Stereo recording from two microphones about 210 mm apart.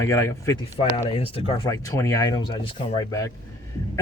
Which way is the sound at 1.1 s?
25° left (ahead or behind).